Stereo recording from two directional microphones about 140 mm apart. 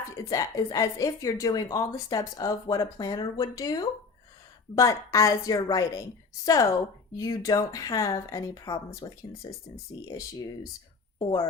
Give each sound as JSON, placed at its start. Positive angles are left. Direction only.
{"t": 0.2, "sound": "a woman's voice", "side_deg": 25}